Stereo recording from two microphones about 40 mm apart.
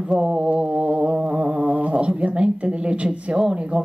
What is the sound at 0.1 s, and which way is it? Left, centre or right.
Speech, right.